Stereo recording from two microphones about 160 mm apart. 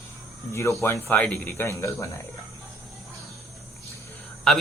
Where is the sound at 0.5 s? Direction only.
15° left (ahead or behind).